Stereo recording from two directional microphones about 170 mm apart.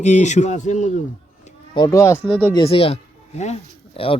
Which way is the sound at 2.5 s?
30° left (ahead or behind).